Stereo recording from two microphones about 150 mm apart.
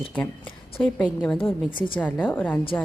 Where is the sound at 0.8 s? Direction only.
5° left (ahead or behind).